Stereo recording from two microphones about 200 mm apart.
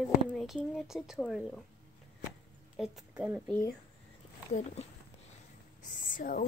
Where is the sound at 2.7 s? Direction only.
Centre (ahead or behind).